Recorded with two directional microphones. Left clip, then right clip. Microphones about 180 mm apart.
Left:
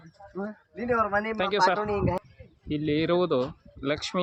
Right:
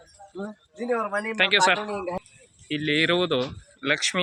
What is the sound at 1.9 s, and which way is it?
Speech, 60° right (ahead or behind).